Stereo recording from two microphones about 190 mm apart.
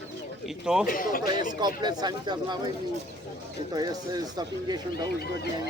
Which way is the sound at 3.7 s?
20° right (ahead or behind).